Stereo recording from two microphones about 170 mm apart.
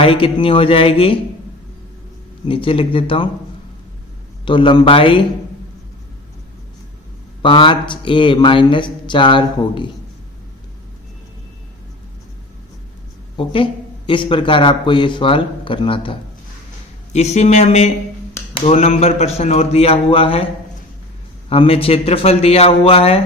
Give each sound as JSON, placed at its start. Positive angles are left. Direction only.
{"t": 0.0, "sound": "a man's voice", "side_deg": 30}
{"t": 2.5, "sound": "a man's voice", "side_deg": 30}
{"t": 4.4, "sound": "a man's voice", "side_deg": 30}
{"t": 7.4, "sound": "speech", "side_deg": 30}
{"t": 13.3, "sound": "a man's voice", "side_deg": 30}
{"t": 21.5, "sound": "a man's voice", "side_deg": 35}